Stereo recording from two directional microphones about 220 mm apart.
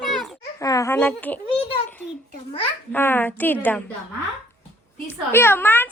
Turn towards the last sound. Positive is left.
turn(degrees=10)  # may be behind; listen again after turning